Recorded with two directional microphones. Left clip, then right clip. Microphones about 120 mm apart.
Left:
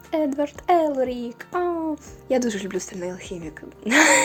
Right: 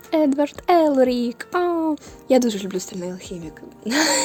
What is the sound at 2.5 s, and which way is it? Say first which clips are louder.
Speech: right 2 dB; 50° right (ahead or behind).